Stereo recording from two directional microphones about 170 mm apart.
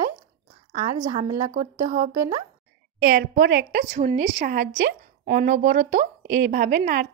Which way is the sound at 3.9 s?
45° right (ahead or behind).